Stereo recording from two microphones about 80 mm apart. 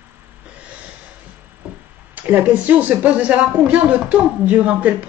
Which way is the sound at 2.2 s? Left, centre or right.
Right.